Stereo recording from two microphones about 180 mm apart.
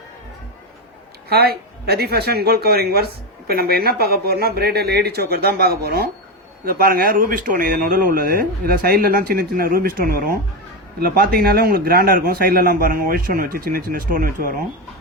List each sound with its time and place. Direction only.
1.3 s speech: 60° right (ahead or behind)